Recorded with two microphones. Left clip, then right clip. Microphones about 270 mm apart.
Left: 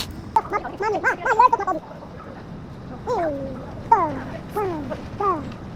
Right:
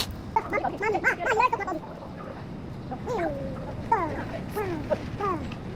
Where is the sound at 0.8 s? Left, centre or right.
Left.